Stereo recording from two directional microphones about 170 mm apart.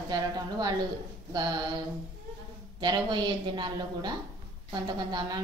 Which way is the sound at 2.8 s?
25° right (ahead or behind).